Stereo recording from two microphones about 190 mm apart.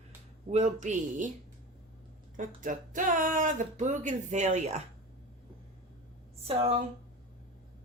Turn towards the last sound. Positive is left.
turn(degrees=-30)  # may be behind; listen again after turning